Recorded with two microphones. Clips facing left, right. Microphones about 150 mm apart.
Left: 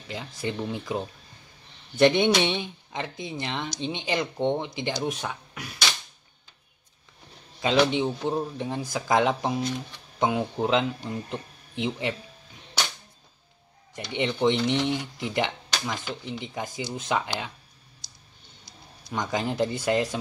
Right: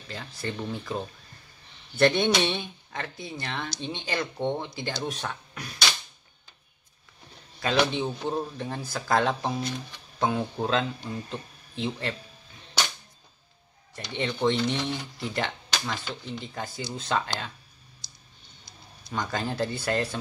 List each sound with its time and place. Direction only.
0.1 s speech: 15° left (ahead or behind)
7.8 s speech: 15° left (ahead or behind)
14.1 s speech: 15° left (ahead or behind)
19.0 s speech: 15° left (ahead or behind)